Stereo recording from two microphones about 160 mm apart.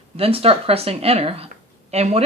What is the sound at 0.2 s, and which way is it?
Speech, 35° right (ahead or behind).